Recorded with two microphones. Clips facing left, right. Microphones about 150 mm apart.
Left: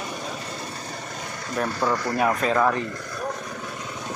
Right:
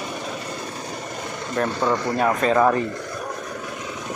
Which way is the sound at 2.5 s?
20° right (ahead or behind).